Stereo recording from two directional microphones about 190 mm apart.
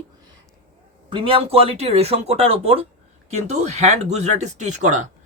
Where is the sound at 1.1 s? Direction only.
30° right (ahead or behind).